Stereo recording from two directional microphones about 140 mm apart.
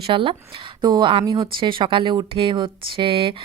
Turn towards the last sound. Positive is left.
turn(degrees=-40)  # may be behind; listen again after turning